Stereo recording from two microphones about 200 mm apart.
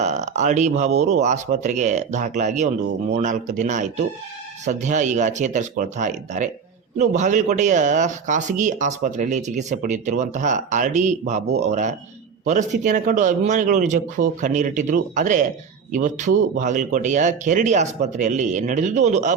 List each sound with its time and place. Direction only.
0.0 s speech: 35° right (ahead or behind)